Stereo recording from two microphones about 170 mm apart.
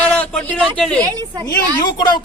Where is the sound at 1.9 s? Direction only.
25° left (ahead or behind).